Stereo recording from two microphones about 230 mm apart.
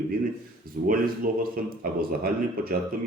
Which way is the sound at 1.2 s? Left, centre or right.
Right.